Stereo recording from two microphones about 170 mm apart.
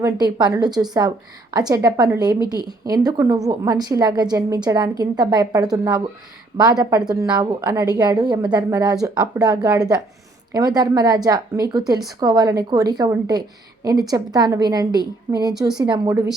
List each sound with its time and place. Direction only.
0.0 s a woman's voice: 25° right (ahead or behind)